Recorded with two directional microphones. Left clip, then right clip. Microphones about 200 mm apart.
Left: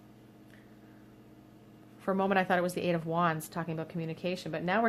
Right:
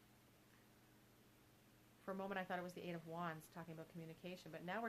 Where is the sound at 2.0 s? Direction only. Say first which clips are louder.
Left 19 dB; 20° left (ahead or behind).